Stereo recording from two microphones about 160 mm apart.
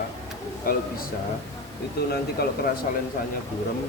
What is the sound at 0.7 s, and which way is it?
Speech, 65° left (ahead or behind).